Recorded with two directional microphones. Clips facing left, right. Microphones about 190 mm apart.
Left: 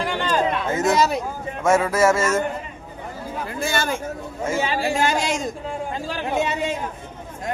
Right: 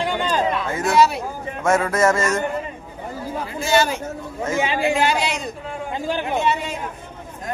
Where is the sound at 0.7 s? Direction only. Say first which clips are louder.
Left 3 dB; 20° left (ahead or behind).